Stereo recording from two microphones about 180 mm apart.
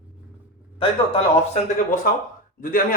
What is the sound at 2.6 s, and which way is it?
Speech, 50° left (ahead or behind).